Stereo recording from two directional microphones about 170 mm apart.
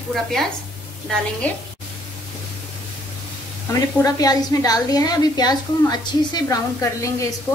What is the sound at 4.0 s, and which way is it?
A woman's voice, 20° left (ahead or behind).